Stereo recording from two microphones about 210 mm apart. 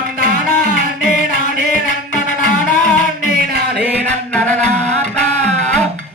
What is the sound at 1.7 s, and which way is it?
Music, 35° left (ahead or behind).